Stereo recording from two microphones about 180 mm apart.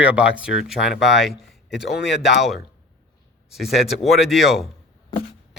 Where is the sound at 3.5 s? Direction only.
Centre (ahead or behind).